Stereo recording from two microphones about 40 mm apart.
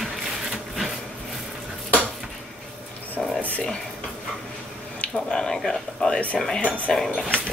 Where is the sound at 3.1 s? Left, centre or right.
Left.